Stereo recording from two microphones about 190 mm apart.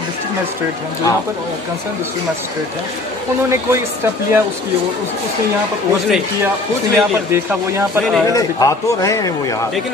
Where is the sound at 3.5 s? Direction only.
15° right (ahead or behind).